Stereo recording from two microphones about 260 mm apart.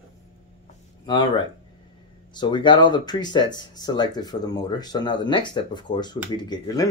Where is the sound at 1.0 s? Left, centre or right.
Centre.